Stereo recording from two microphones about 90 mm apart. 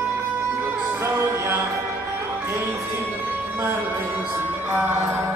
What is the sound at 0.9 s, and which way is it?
Music, 30° right (ahead or behind).